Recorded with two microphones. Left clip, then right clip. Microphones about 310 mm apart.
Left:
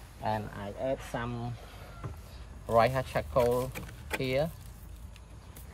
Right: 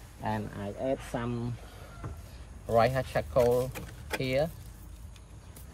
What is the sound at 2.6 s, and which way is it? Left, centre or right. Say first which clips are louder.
Speech: even; centre.